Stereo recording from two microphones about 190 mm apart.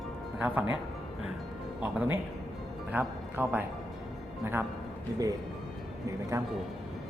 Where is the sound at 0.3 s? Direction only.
10° right (ahead or behind).